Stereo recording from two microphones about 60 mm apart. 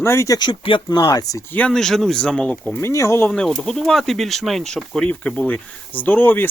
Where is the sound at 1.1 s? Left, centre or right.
Left.